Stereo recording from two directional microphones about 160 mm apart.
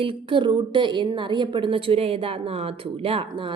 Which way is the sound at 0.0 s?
30° right (ahead or behind).